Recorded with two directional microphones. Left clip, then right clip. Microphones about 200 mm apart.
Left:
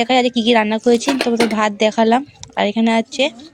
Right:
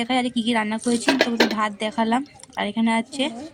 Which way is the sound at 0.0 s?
30° left (ahead or behind).